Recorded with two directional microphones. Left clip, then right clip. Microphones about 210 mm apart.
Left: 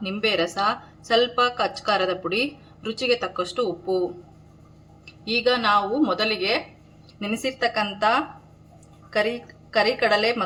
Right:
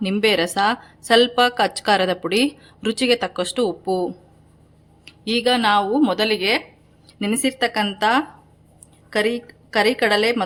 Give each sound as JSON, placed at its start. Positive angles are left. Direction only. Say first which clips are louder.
{"t": 0.0, "sound": "a woman's voice", "louder": "right 5 dB", "side_deg": -50}
{"t": 5.0, "sound": "a woman's voice", "louder": "right 2 dB", "side_deg": -55}